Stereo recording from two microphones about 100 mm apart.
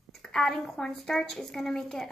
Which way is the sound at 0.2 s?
5° left (ahead or behind).